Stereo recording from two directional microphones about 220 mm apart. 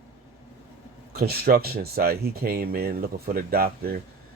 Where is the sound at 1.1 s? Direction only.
45° right (ahead or behind).